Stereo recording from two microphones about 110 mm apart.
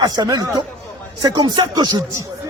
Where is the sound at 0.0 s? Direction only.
40° right (ahead or behind).